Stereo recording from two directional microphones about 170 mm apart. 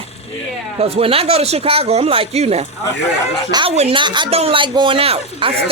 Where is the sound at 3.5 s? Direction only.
25° right (ahead or behind).